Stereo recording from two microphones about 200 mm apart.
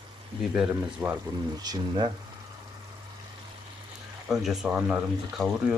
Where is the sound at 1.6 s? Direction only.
20° right (ahead or behind).